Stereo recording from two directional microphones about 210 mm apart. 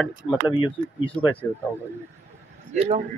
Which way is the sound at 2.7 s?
30° right (ahead or behind).